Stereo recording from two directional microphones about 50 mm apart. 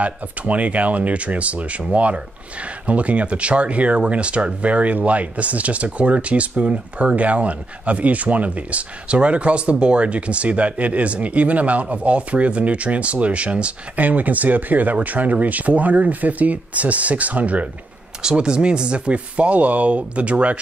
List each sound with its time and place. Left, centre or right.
0.0 s speech: right
18.2 s speech: centre